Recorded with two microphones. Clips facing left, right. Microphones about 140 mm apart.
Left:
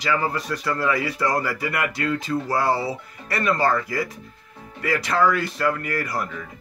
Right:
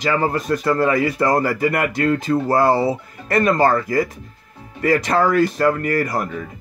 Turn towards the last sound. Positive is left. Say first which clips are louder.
# right 6 dB
turn(degrees=-45)  # may be behind; listen again after turning